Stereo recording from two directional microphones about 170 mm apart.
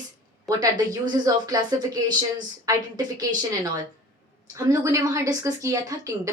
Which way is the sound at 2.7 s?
20° right (ahead or behind).